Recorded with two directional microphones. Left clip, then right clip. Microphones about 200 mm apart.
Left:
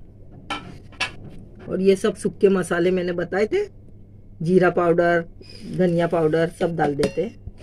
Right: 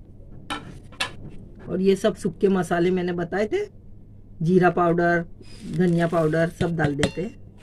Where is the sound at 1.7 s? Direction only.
20° right (ahead or behind).